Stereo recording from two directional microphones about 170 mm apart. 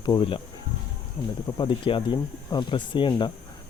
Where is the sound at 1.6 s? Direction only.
30° left (ahead or behind).